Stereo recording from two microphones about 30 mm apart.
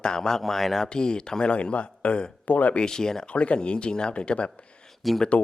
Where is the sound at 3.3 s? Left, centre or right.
Left.